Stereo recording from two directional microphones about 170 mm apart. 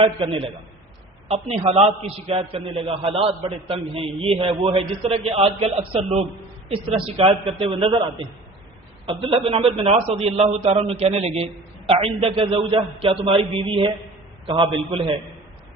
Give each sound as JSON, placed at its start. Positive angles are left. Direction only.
{"t": 0.0, "sound": "a man's voice", "side_deg": -30}
{"t": 9.0, "sound": "a man's voice", "side_deg": -35}